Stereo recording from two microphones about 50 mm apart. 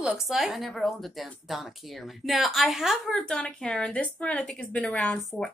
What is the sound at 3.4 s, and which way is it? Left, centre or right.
A woman's voice, centre.